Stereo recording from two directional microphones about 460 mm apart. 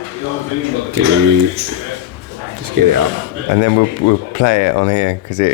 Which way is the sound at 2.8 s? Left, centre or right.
Right.